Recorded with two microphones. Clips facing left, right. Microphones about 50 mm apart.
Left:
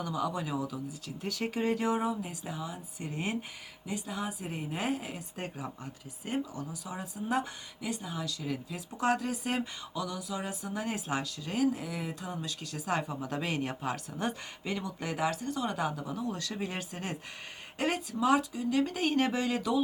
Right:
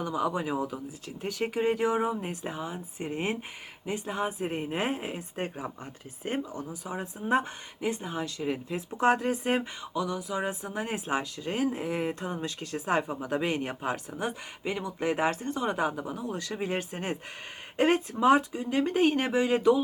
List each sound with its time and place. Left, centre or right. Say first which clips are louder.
0.0 s speech: right 4 dB; right
2.2 s speech: right 4 dB; right
19.1 s speech: right 3 dB; centre